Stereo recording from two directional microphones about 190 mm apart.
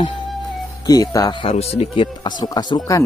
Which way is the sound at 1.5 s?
35° left (ahead or behind).